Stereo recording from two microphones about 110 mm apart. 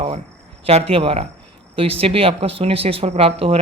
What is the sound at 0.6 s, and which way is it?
Speech, 65° right (ahead or behind).